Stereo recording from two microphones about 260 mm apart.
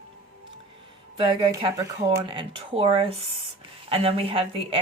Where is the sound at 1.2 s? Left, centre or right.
Centre.